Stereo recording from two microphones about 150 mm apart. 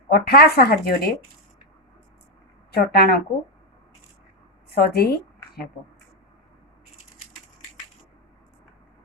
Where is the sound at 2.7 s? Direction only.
90° left.